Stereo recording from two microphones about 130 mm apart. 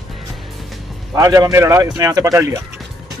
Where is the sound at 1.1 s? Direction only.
25° right (ahead or behind).